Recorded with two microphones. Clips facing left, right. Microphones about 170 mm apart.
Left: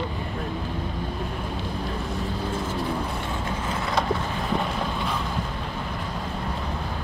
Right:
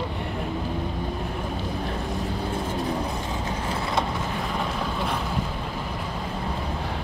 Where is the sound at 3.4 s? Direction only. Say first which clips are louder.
Even; 25° right (ahead or behind).